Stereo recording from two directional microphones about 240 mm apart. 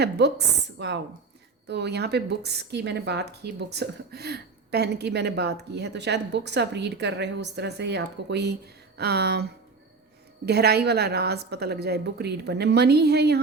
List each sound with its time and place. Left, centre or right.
0.0 s a woman's voice: right